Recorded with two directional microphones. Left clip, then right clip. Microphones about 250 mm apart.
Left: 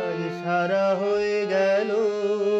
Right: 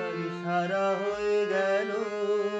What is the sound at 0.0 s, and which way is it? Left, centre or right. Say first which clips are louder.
Music: left 5 dB; left.